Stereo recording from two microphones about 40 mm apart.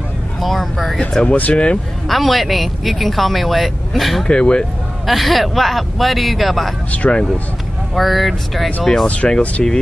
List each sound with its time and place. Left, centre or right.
0.4 s a sound: centre
0.9 s speech: left
1.3 s speech: left
2.0 s speech: centre
4.3 s speech: left
5.0 s speech: centre
6.9 s speech: left
7.9 s speech: centre
9.0 s speech: left